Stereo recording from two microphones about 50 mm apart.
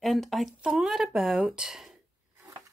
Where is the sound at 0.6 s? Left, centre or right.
Centre.